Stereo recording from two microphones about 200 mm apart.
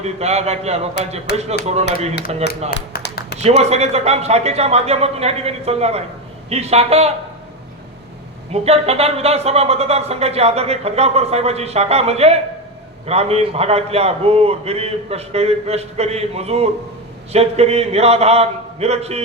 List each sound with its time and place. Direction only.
0.0 s speech: 35° right (ahead or behind)
2.1 s speech: 50° left (ahead or behind)
3.3 s speech: 30° right (ahead or behind)
8.5 s speech: 30° right (ahead or behind)